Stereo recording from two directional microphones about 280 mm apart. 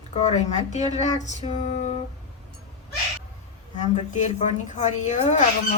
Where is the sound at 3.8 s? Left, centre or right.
Left.